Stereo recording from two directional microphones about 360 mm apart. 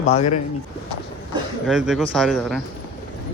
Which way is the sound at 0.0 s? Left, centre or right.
Centre.